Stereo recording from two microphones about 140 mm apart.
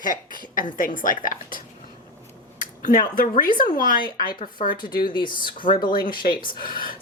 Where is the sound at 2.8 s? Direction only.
85° left.